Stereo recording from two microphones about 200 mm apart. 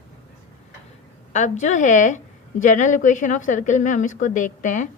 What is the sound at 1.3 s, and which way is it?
Speech, 35° left (ahead or behind).